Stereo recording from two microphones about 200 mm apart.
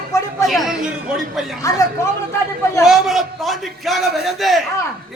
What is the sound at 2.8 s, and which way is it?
A man's voice, centre (ahead or behind).